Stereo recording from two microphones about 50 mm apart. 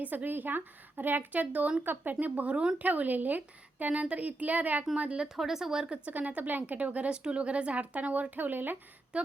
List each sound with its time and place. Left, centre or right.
0.0 s speech: right
1.8 s speech: right
2.1 s speech: right
4.9 s speech: right
5.3 s a woman's voice: centre
5.9 s speech: right
9.1 s speech: right